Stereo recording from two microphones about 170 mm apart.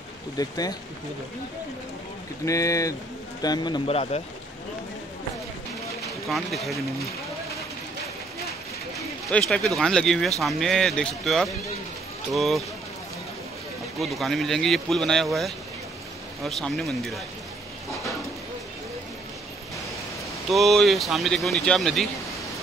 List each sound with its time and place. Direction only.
0.4 s speech: 20° left (ahead or behind)
2.4 s a man's voice: 20° left (ahead or behind); by 4.2 s 35° left (ahead or behind)
6.2 s speech: centre (ahead or behind)
8.9 s speech: 5° left (ahead or behind)
13.9 s speech: centre (ahead or behind)
20.4 s speech: centre (ahead or behind)